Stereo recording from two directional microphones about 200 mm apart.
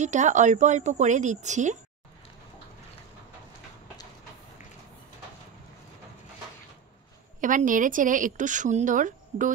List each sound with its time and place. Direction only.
0.0 s speech: 35° right (ahead or behind)
7.3 s speech: 40° right (ahead or behind)